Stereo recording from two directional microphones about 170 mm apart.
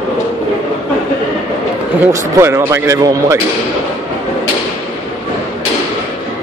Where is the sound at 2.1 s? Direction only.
15° right (ahead or behind).